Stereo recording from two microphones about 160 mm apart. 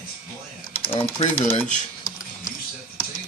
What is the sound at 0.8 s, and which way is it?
Typing, 35° left (ahead or behind).